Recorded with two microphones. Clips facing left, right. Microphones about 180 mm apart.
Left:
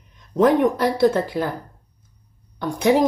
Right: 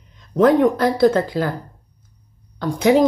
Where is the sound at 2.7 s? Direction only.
20° right (ahead or behind).